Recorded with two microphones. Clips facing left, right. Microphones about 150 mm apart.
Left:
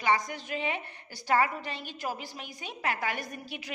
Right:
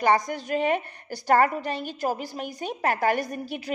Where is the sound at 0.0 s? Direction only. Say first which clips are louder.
Right 6 dB; 45° right (ahead or behind).